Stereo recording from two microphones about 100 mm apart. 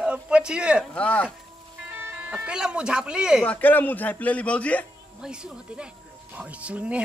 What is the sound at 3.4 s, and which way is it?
A man's voice, 15° left (ahead or behind).